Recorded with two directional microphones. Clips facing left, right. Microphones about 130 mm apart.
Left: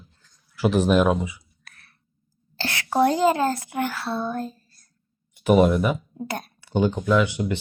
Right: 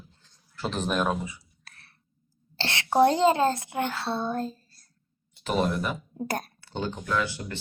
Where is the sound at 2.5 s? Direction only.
25° right (ahead or behind).